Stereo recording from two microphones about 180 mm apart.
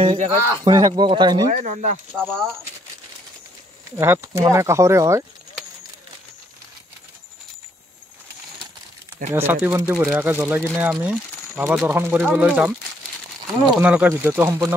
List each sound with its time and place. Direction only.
0.0 s speech: 30° right (ahead or behind)
0.5 s speech: 20° right (ahead or behind)
1.5 s speech: 45° right (ahead or behind)
2.1 s speech: 5° left (ahead or behind)
3.9 s speech: 15° right (ahead or behind)
9.3 s speech: 10° right (ahead or behind)
13.7 s speech: 10° right (ahead or behind)